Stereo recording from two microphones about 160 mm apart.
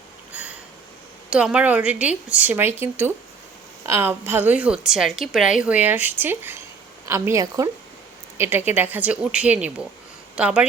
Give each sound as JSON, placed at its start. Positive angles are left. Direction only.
{"t": 0.3, "sound": "sniff", "side_deg": -10}
{"t": 1.3, "sound": "a woman's voice", "side_deg": -5}